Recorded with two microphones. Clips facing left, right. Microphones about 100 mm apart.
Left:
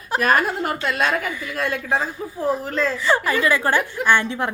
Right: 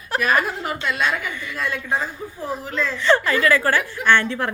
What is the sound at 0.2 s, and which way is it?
A woman's voice, 50° left (ahead or behind).